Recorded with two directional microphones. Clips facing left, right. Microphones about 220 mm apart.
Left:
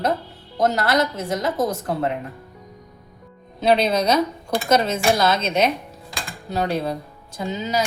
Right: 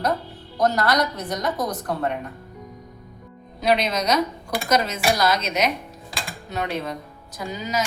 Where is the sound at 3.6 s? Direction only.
30° left (ahead or behind).